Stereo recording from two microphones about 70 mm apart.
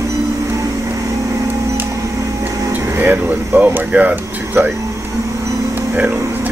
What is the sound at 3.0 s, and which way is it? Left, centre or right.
Air conditioning, right.